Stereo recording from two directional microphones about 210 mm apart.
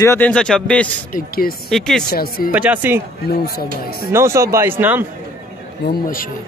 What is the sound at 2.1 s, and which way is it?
Speech, 45° left (ahead or behind).